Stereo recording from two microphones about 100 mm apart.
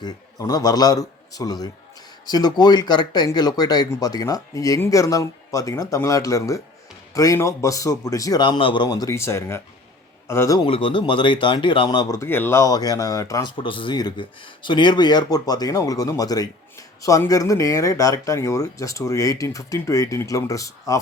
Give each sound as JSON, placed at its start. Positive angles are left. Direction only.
{"t": 0.3, "sound": "a man's voice", "side_deg": 40}
{"t": 8.4, "sound": "speech", "side_deg": 55}
{"t": 9.1, "sound": "speech", "side_deg": 25}
{"t": 10.7, "sound": "speech", "side_deg": 60}
{"t": 12.2, "sound": "speech", "side_deg": 25}
{"t": 13.6, "sound": "speech", "side_deg": 55}